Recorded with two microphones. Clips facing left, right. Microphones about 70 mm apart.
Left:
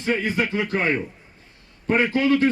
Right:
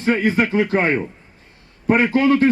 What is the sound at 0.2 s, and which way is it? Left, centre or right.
Speech, right.